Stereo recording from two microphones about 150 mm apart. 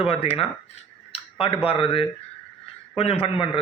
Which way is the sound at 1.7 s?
40° left (ahead or behind).